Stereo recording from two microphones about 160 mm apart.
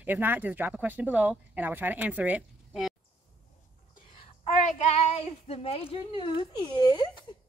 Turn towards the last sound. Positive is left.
turn(degrees=25)  # may be behind; listen again after turning